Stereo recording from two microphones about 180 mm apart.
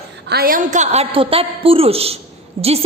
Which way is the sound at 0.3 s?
55° right (ahead or behind).